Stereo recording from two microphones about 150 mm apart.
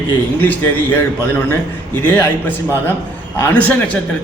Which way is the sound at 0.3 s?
10° left (ahead or behind).